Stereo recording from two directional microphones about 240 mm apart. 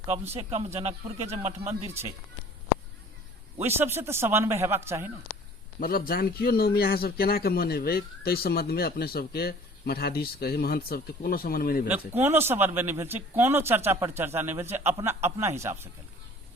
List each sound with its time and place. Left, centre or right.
0.1 s speech: right
3.6 s speech: centre
5.8 s a man's voice: left
11.9 s speech: centre